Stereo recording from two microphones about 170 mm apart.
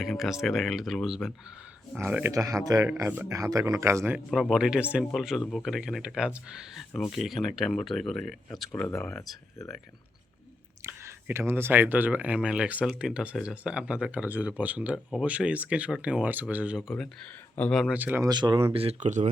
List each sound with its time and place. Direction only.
0.0 s speech: centre (ahead or behind)
2.0 s speech: 15° right (ahead or behind)
4.3 s speech: centre (ahead or behind)
8.7 s speech: 10° left (ahead or behind)
10.8 s speech: 15° right (ahead or behind)
18.3 s speech: 25° right (ahead or behind); by 19.3 s 45° right (ahead or behind)